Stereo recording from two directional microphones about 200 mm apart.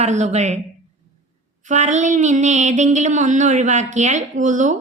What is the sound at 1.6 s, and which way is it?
Speech, 35° right (ahead or behind).